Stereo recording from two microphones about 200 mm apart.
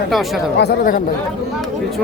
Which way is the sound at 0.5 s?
50° left (ahead or behind).